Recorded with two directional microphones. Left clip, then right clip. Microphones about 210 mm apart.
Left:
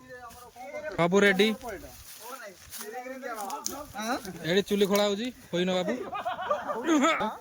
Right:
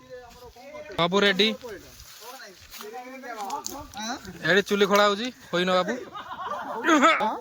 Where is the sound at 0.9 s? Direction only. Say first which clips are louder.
Right 1 dB; 15° left (ahead or behind).